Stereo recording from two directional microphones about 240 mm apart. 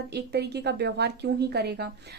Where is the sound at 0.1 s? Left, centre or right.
Right.